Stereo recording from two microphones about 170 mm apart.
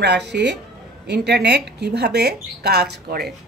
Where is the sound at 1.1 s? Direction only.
80° right.